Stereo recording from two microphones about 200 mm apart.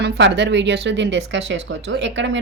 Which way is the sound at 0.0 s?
65° right (ahead or behind).